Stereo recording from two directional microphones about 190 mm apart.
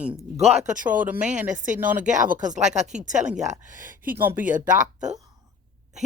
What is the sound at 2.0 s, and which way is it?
Speech, 40° right (ahead or behind).